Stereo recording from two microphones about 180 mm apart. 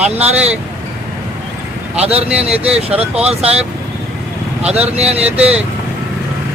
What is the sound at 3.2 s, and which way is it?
Speech, 35° right (ahead or behind).